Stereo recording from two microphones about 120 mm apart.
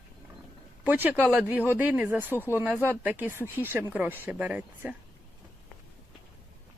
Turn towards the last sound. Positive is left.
turn(degrees=-10)  # may be behind; listen again after turning